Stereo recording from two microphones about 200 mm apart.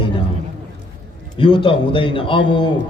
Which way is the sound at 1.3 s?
25° left (ahead or behind).